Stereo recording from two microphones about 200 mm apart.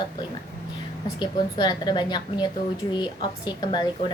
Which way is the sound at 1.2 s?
20° left (ahead or behind).